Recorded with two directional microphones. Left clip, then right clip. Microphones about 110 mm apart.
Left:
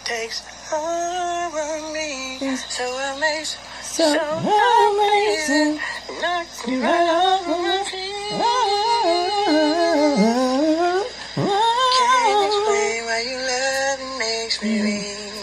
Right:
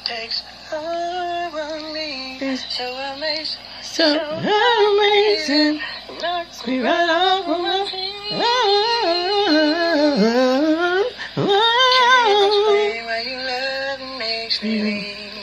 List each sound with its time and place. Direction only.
0.7 s a sound: 30° left (ahead or behind)
2.8 s music: 25° left (ahead or behind)
6.2 s female singing: 30° left (ahead or behind)
10.8 s humming: 25° left (ahead or behind)
13.7 s music: 40° left (ahead or behind)